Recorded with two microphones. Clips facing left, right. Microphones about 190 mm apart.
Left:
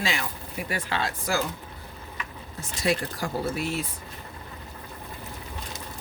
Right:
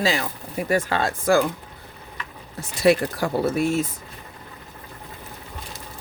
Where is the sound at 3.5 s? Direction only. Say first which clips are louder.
Right 8 dB; 45° right (ahead or behind).